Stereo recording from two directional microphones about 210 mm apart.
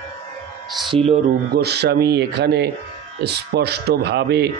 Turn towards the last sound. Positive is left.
turn(degrees=-50)  # may be behind; listen again after turning